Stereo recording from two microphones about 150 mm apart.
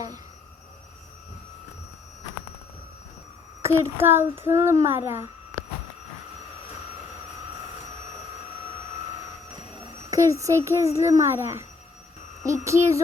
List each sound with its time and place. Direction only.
3.6 s a child's voice: 20° right (ahead or behind)
10.1 s a child's voice: 20° right (ahead or behind)
12.6 s a child's voice: 20° right (ahead or behind)